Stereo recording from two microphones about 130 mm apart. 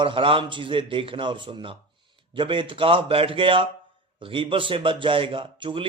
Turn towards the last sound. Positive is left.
turn(degrees=-40)  # may be behind; listen again after turning